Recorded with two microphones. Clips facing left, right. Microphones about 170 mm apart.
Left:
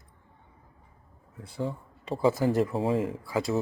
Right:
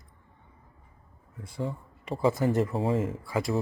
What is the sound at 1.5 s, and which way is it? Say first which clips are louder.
Speech: left 1 dB; centre (ahead or behind).